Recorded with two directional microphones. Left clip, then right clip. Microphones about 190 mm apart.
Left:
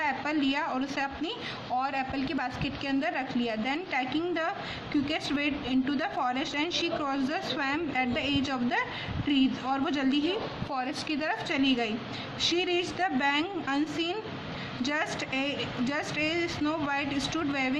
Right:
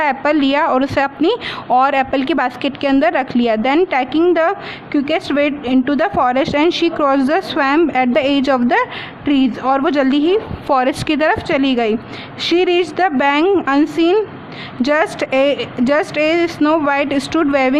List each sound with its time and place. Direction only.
0.0 s a woman's voice: 55° right (ahead or behind)